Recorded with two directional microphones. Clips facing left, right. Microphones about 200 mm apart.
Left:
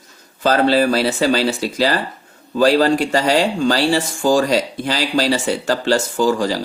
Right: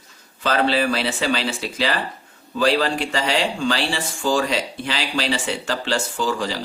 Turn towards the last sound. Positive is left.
turn(degrees=40)  # may be behind; listen again after turning